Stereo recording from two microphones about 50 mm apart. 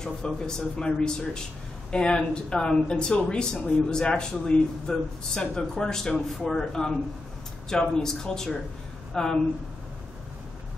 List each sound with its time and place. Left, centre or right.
0.0 s speech: centre